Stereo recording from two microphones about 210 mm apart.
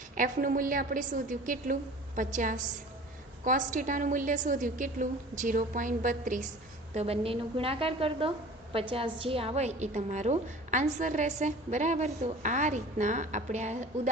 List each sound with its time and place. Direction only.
0.2 s a woman's voice: 40° right (ahead or behind)